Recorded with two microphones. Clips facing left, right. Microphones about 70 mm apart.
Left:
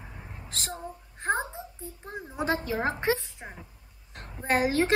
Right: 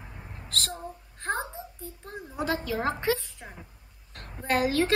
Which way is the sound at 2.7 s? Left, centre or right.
Left.